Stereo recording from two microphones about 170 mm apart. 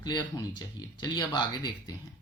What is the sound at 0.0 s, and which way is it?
Speech, 25° left (ahead or behind).